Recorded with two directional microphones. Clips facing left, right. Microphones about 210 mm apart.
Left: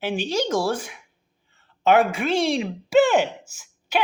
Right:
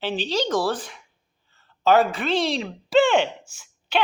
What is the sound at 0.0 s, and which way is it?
A woman's voice, 10° left (ahead or behind).